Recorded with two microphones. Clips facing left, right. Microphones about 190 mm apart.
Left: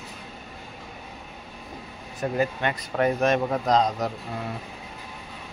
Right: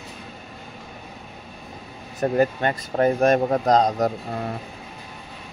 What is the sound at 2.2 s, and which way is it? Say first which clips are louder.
Speech: right 5 dB; 40° right (ahead or behind).